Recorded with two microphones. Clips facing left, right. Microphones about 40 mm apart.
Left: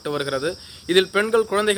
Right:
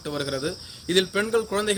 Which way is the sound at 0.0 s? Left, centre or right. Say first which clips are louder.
Left 4 dB; left.